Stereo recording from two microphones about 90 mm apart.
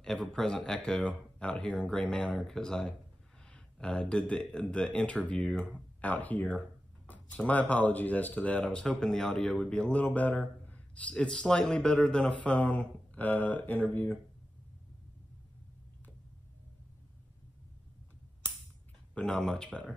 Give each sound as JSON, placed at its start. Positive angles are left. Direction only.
{"t": 0.0, "sound": "speech", "side_deg": 5}
{"t": 19.1, "sound": "speech", "side_deg": 10}